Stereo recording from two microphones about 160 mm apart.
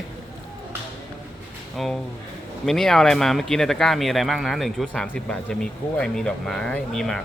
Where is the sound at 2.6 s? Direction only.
Centre (ahead or behind).